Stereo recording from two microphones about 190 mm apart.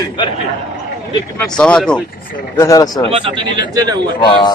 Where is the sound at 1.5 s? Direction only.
5° left (ahead or behind).